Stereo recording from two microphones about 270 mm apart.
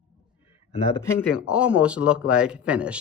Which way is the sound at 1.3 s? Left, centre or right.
Centre.